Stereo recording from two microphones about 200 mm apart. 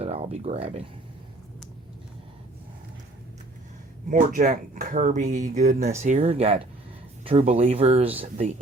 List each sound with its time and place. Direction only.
0.0 s speech: 30° right (ahead or behind)
4.1 s speech: 40° right (ahead or behind)